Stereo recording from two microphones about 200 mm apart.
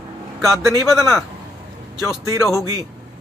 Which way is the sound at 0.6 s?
15° right (ahead or behind).